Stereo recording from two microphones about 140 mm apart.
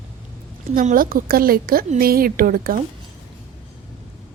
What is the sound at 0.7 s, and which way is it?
A woman's voice, 80° right.